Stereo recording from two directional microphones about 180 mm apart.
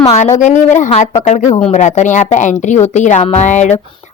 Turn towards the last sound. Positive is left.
turn(degrees=40)  # may be behind; listen again after turning